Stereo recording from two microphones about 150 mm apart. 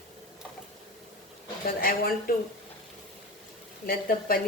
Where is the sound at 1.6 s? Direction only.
80° left.